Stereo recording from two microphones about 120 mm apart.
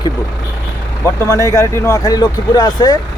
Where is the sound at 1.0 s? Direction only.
25° left (ahead or behind).